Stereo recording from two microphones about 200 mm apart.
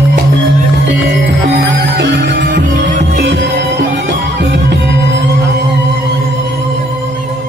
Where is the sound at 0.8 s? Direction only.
65° right (ahead or behind).